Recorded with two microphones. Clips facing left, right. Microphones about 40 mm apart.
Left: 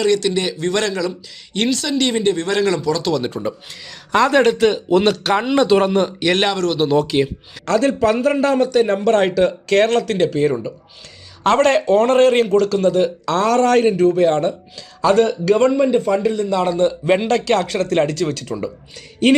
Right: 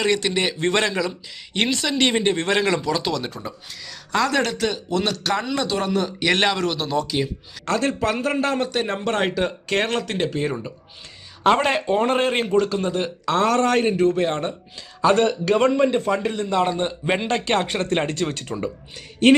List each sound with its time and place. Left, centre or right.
0.0 s a man's voice: centre
0.8 s speech: centre
3.1 s speech: centre; by 6.1 s left
6.1 s a man's voice: centre
6.7 s speech: centre
7.9 s speech: centre
17.1 s speech: centre